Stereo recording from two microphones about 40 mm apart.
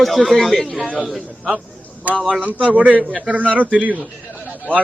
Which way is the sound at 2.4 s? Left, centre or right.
Right.